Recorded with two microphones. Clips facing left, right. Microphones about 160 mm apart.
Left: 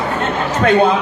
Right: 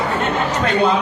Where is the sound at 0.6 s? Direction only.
55° left (ahead or behind).